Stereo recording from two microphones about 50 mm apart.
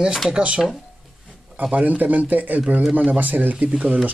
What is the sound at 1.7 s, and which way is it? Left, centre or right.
Speech, right.